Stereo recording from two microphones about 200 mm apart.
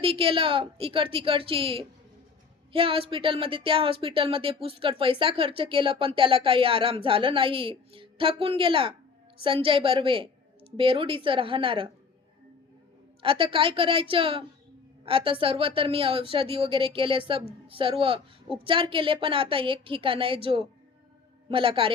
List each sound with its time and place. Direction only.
0.0 s speech: 25° right (ahead or behind)
13.2 s speech: 25° right (ahead or behind)